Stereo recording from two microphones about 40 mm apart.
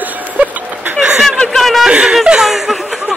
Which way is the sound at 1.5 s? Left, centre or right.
Centre.